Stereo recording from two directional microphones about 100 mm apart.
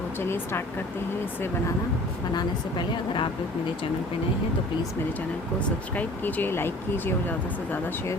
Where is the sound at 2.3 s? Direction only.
45° left (ahead or behind).